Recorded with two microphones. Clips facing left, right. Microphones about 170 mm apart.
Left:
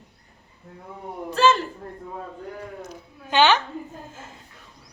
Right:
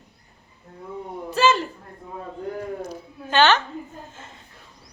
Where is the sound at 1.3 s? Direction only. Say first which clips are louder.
Left 1 dB; 5° right (ahead or behind).